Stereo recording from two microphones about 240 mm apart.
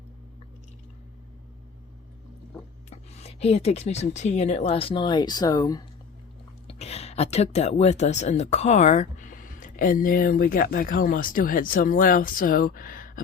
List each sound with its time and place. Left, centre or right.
2.9 s speech: left
6.7 s speech: left